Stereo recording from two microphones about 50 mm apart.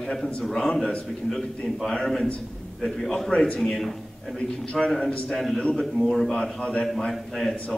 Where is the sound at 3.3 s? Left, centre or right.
Left.